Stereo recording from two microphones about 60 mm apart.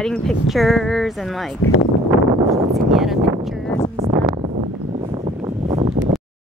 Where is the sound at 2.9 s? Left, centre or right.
Centre.